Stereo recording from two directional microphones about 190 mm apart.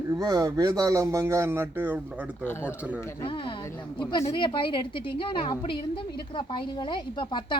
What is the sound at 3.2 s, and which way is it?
A woman's voice, 25° left (ahead or behind).